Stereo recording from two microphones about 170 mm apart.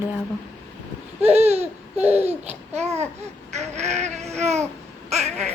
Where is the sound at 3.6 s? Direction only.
40° right (ahead or behind).